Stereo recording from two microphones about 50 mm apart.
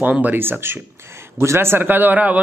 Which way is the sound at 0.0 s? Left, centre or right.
Right.